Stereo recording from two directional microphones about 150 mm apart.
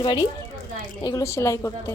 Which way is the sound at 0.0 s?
30° left (ahead or behind).